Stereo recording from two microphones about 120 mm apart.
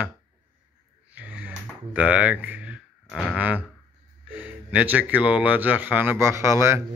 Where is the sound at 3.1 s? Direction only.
Centre (ahead or behind).